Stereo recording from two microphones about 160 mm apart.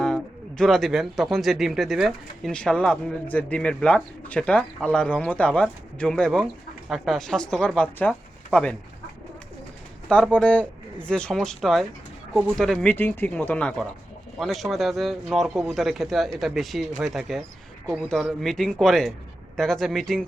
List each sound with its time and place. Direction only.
0.0 s speech: 5° left (ahead or behind)
10.3 s speech: 10° left (ahead or behind)